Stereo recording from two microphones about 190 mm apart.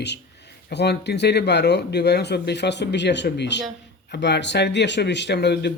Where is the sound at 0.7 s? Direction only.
60° left (ahead or behind).